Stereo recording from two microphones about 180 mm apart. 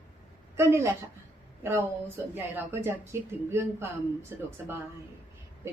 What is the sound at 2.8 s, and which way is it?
Speech, 15° right (ahead or behind).